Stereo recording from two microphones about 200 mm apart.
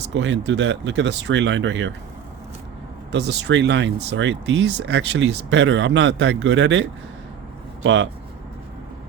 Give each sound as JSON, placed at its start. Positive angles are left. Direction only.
{"t": 0.1, "sound": "speech", "side_deg": -65}
{"t": 3.1, "sound": "speech", "side_deg": -60}